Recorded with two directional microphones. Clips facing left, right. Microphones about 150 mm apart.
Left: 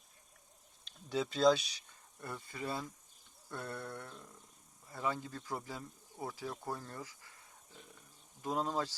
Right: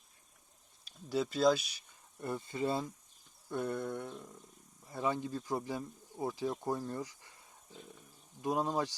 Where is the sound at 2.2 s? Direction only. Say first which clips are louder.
Right 7 dB; 25° right (ahead or behind).